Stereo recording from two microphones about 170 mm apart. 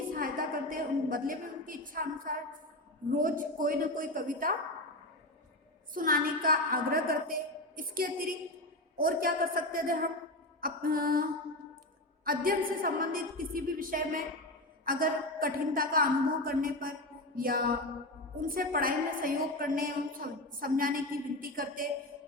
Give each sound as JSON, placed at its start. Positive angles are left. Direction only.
{"t": 0.1, "sound": "a sound", "side_deg": -55}
{"t": 3.1, "sound": "a woman's voice", "side_deg": -55}
{"t": 5.9, "sound": "a woman's voice", "side_deg": -55}
{"t": 10.6, "sound": "music", "side_deg": -60}
{"t": 12.2, "sound": "a woman's voice", "side_deg": -60}